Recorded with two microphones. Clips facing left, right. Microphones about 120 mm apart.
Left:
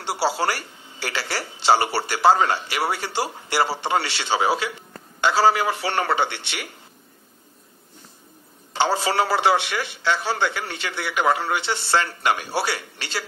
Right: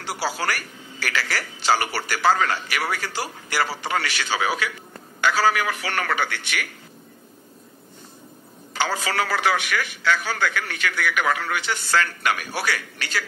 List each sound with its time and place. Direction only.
0.0 s speech: 30° left (ahead or behind)
8.7 s speech: 30° left (ahead or behind)